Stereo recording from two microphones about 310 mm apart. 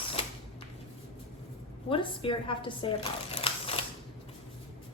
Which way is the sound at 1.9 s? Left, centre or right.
Centre.